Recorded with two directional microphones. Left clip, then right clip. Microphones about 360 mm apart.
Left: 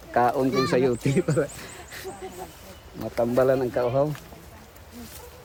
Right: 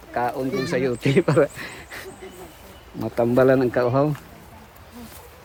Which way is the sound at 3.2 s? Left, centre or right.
Right.